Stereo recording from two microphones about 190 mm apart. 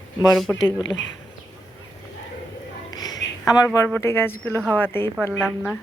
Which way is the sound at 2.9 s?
20° left (ahead or behind).